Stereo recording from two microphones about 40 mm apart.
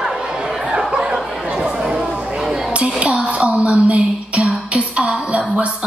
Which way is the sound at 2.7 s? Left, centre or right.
Right.